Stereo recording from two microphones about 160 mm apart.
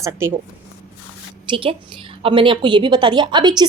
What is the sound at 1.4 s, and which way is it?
A woman's voice, 35° right (ahead or behind).